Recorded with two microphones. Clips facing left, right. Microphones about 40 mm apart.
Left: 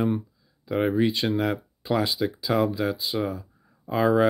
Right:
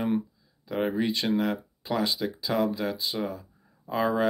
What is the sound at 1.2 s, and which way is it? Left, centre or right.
Speech, centre.